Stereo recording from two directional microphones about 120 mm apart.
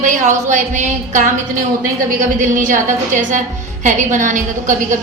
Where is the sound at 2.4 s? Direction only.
90° right.